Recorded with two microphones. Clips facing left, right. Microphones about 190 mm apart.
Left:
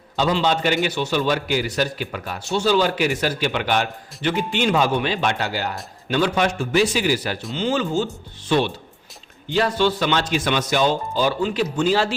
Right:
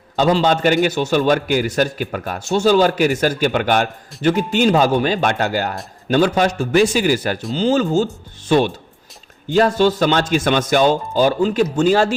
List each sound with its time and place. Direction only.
0.2 s a man's voice: 45° right (ahead or behind)